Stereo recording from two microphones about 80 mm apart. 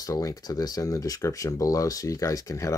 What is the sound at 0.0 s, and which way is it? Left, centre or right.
Speech, left.